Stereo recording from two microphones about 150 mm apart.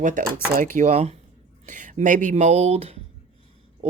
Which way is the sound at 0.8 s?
50° right (ahead or behind).